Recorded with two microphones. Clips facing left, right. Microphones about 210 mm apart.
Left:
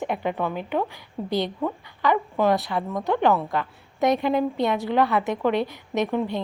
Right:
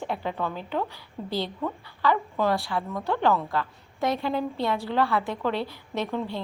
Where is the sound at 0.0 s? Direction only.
15° left (ahead or behind).